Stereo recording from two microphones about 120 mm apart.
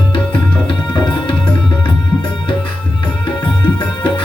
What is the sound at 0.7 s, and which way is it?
Music, 40° left (ahead or behind).